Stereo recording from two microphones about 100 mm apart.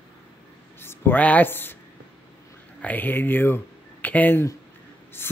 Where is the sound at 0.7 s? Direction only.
20° left (ahead or behind).